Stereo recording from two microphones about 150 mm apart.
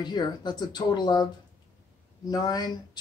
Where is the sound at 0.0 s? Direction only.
30° left (ahead or behind).